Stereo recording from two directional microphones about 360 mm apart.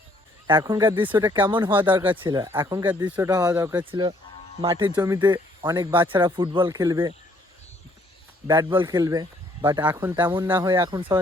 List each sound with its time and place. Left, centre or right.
0.4 s speech: centre
8.4 s speech: centre